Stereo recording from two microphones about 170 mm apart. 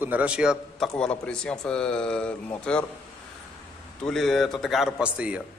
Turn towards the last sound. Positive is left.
turn(degrees=-5)  # may be behind; listen again after turning